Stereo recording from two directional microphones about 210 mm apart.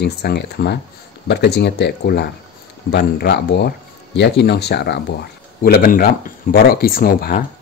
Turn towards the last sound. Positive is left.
turn(degrees=45)  # may be behind; listen again after turning